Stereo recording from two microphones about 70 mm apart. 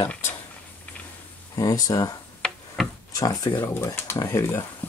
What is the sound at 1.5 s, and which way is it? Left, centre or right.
Speech, left.